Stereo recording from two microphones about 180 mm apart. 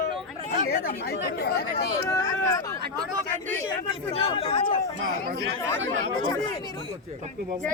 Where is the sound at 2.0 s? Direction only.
15° left (ahead or behind).